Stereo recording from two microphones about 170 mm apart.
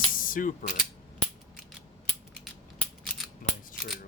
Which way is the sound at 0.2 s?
55° left (ahead or behind).